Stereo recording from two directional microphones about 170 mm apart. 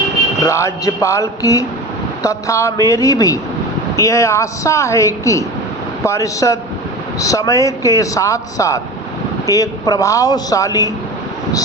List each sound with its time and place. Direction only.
0.4 s a man's voice: 20° left (ahead or behind)